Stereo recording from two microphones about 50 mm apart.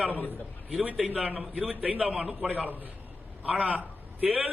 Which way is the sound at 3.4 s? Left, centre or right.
Right.